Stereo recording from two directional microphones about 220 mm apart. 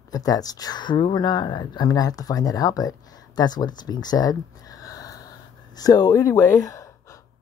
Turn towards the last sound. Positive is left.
turn(degrees=15)  # may be behind; listen again after turning